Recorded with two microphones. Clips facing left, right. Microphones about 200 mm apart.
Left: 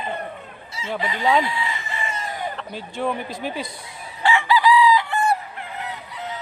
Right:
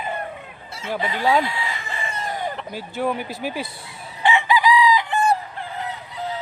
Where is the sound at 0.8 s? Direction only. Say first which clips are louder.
Even; 60° right (ahead or behind).